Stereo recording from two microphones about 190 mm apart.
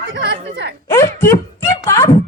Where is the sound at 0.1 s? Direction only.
65° right (ahead or behind).